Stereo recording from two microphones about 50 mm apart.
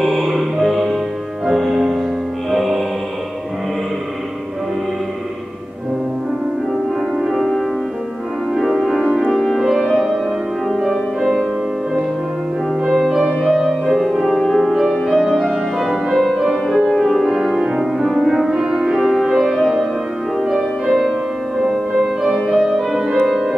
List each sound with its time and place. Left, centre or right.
0.0 s music: centre
7.3 s music: centre
12.8 s music: centre
22.2 s music: centre